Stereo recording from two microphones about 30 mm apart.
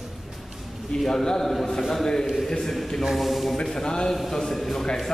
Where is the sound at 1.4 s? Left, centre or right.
Centre.